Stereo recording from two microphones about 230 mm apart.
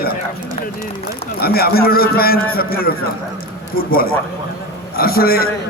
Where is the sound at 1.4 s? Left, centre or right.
Left.